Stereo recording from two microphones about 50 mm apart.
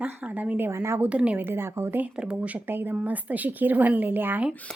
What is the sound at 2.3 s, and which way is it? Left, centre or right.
Speech, right.